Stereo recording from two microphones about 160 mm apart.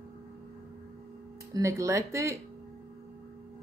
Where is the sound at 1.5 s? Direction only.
20° right (ahead or behind).